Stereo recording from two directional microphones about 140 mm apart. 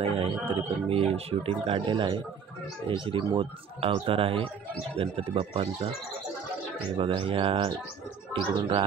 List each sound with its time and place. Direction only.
0.0 s speech: 40° right (ahead or behind)
7.0 s speech: 40° right (ahead or behind)